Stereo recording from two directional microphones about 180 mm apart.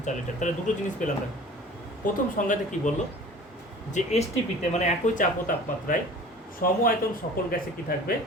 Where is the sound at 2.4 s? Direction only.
50° left (ahead or behind).